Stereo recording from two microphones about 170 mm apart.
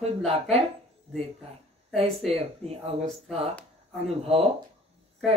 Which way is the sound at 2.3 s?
35° right (ahead or behind).